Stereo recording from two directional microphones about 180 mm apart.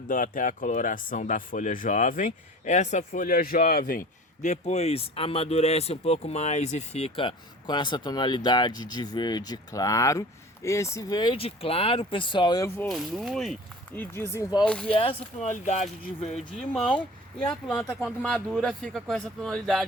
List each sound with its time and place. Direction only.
0.1 s speech: 50° left (ahead or behind)
4.4 s speech: 40° left (ahead or behind); by 12.9 s 15° left (ahead or behind)
12.9 s speech: centre (ahead or behind)
14.9 s speech: 30° left (ahead or behind)
17.5 s speech: 5° left (ahead or behind)